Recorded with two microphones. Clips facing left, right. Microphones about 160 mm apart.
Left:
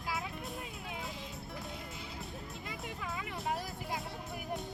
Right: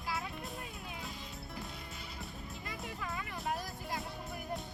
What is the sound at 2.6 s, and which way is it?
Music, 15° left (ahead or behind).